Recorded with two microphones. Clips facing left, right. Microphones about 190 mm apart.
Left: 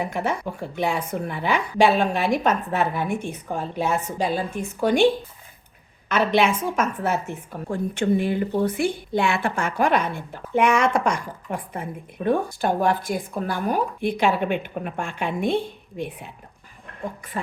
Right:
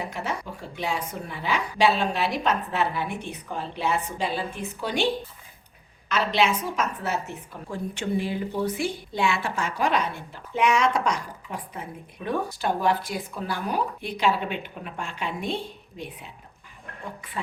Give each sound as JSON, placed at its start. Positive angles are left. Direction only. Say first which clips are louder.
{"t": 0.0, "sound": "a woman's voice", "louder": "left 6 dB", "side_deg": 55}
{"t": 6.1, "sound": "a woman's voice", "louder": "left 4 dB", "side_deg": 55}